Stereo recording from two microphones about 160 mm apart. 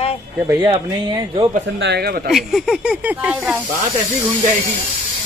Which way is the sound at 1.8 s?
90° right.